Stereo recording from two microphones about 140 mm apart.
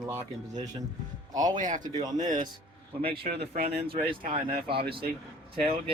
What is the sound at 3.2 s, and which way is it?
Speech, 90° right.